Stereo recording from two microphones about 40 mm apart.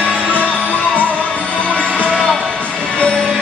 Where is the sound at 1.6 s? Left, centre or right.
Left.